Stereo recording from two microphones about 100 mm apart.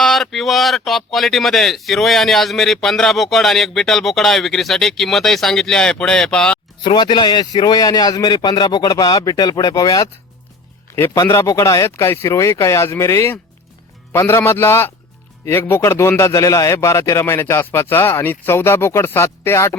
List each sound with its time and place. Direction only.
0.0 s speech: centre (ahead or behind)
6.8 s a man's voice: 45° left (ahead or behind)
11.3 s a man's voice: 25° left (ahead or behind)